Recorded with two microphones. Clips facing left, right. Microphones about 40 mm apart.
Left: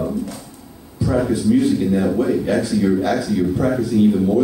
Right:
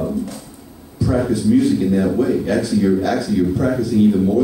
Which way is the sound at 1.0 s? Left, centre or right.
Centre.